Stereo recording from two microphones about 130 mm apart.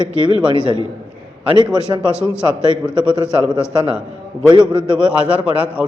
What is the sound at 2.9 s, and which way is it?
Speech, 5° right (ahead or behind).